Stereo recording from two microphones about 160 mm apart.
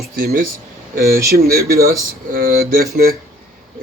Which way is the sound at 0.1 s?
65° right (ahead or behind).